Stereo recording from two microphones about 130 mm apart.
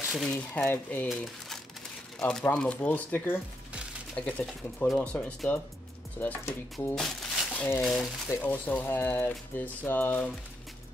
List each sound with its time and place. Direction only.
0.1 s speech: 5° left (ahead or behind)
7.0 s crumpling: centre (ahead or behind)
7.8 s speech: centre (ahead or behind)
8.4 s speech: 10° left (ahead or behind)